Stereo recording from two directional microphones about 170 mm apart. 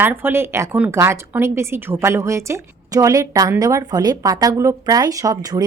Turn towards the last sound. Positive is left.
turn(degrees=-20)  # may be behind; listen again after turning